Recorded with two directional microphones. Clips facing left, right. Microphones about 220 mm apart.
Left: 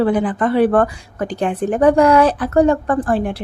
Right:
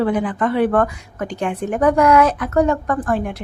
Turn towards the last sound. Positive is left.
turn(degrees=30)  # may be behind; listen again after turning